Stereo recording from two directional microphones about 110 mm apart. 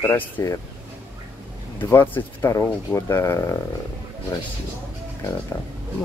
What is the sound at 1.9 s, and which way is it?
Speech, 25° left (ahead or behind).